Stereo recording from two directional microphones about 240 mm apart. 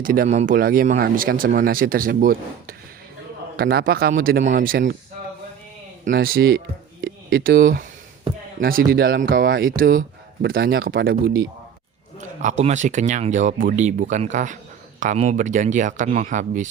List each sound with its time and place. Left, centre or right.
0.0 s speech: right
6.1 s speech: right
12.4 s speech: right